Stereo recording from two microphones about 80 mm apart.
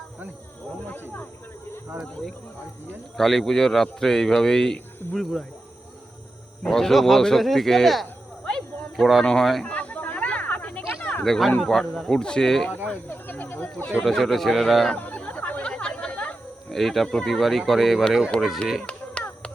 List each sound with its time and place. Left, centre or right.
3.2 s speech: centre
6.7 s speech: centre
8.4 s a sound: centre
9.2 s speech: centre
9.6 s snake: centre
11.6 s speech: centre
12.9 s speech: left
14.0 s speech: centre
14.9 s chatter: centre
16.7 s speech: centre
18.3 s a sound: centre